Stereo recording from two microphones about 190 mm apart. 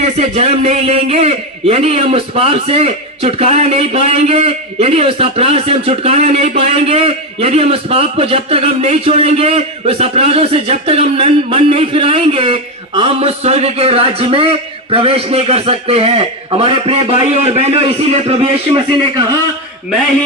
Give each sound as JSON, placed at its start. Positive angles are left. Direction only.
{"t": 0.0, "sound": "a man's voice", "side_deg": -35}